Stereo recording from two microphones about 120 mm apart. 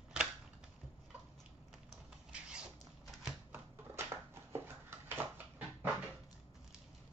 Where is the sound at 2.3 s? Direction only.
10° right (ahead or behind).